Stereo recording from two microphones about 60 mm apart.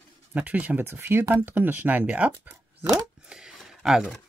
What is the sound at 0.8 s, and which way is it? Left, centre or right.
Speech, right.